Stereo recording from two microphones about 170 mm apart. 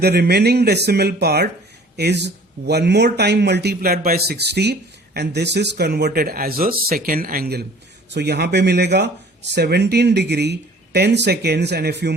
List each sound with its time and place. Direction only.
0.0 s speech: 70° right (ahead or behind)
2.0 s speech: 85° right; by 7.6 s 65° right (ahead or behind)
8.1 s speech: 75° right (ahead or behind)